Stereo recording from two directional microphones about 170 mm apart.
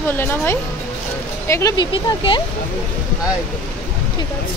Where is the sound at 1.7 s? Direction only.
30° left (ahead or behind).